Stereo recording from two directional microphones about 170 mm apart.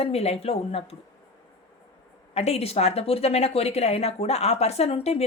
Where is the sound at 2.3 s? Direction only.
40° left (ahead or behind).